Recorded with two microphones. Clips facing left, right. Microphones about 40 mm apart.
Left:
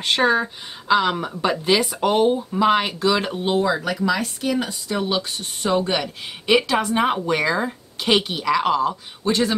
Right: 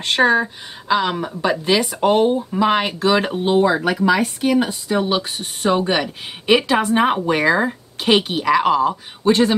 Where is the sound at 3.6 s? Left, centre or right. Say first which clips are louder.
Right 6 dB; right.